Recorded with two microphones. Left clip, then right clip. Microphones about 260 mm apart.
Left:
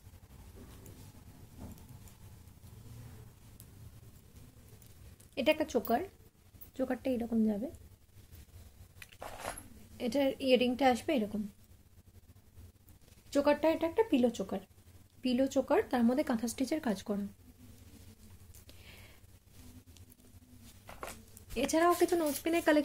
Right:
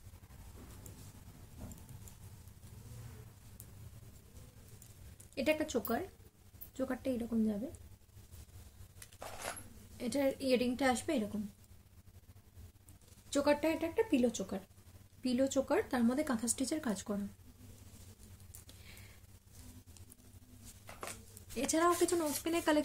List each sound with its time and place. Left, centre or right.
5.3 s speech: centre
9.2 s zipper: centre
13.3 s speech: centre
20.8 s a sound: centre
22.4 s speech: centre